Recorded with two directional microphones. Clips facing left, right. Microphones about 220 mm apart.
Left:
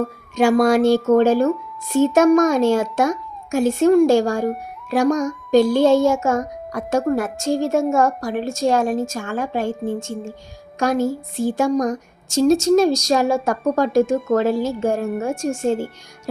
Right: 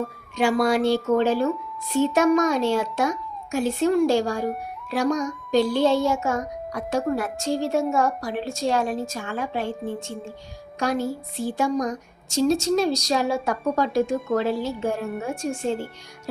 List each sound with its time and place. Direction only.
0.3 s a woman's voice: 45° left (ahead or behind)